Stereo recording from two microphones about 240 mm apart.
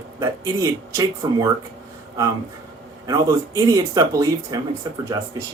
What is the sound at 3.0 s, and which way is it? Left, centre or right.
Speech, centre.